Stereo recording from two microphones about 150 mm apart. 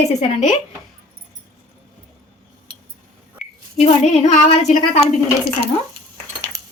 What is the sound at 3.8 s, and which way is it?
Speech, 45° left (ahead or behind).